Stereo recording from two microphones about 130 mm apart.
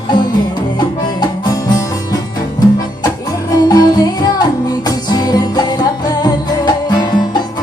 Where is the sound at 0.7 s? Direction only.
30° left (ahead or behind).